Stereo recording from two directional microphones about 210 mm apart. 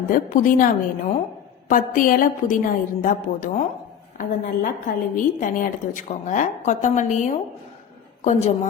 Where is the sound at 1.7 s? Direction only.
40° left (ahead or behind).